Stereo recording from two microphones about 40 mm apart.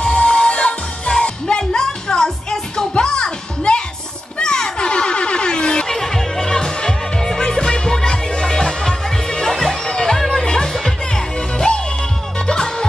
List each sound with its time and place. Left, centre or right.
0.0 s music: left
4.4 s a sound: centre
5.9 s music: centre